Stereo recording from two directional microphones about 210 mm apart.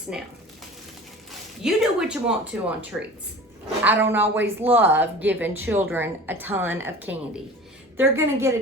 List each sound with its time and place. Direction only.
1.3 s a woman's voice: 5° right (ahead or behind)